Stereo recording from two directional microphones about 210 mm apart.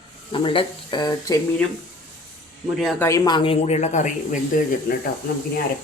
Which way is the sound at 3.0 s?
15° left (ahead or behind).